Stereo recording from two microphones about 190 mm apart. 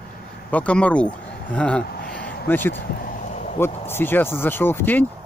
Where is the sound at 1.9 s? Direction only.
50° left (ahead or behind).